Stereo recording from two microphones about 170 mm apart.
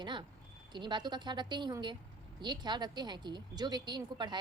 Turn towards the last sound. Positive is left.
turn(degrees=-25)  # may be behind; listen again after turning